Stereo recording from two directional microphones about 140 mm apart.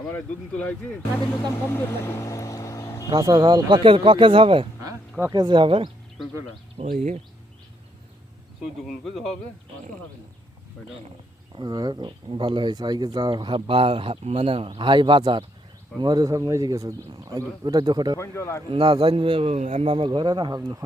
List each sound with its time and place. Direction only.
0.0 s speech: 10° left (ahead or behind)
3.1 s speech: 25° right (ahead or behind)
6.8 s speech: 65° right (ahead or behind)
8.9 s speech: centre (ahead or behind)
10.8 s speech: 5° left (ahead or behind)
11.5 s speech: 30° right (ahead or behind)
18.2 s speech: 20° left (ahead or behind)
18.7 s speech: 40° right (ahead or behind)
19.5 s speech: 55° right (ahead or behind)
20.1 s speech: 30° right (ahead or behind)